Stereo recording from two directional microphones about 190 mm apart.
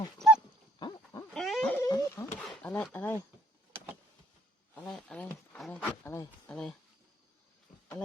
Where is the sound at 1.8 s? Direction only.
20° left (ahead or behind).